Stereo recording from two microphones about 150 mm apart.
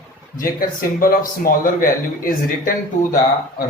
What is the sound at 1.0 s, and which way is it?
Speech, 70° left (ahead or behind).